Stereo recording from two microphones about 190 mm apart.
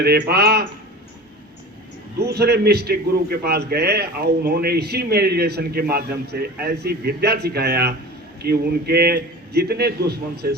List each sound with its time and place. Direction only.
0.0 s speech: 55° right (ahead or behind)
2.1 s speech: 60° right (ahead or behind)